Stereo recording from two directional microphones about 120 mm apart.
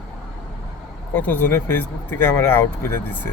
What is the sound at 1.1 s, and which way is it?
Speech, 15° left (ahead or behind).